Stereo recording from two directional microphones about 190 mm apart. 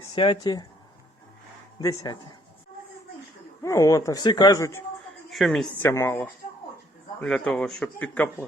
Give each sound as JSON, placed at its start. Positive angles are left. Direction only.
{"t": 0.2, "sound": "speech", "side_deg": 25}
{"t": 1.8, "sound": "speech", "side_deg": 20}
{"t": 3.6, "sound": "speech", "side_deg": 15}
{"t": 5.3, "sound": "a man's voice", "side_deg": 0}